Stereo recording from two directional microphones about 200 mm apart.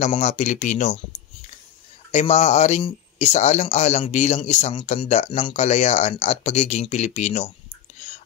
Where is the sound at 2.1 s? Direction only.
35° left (ahead or behind).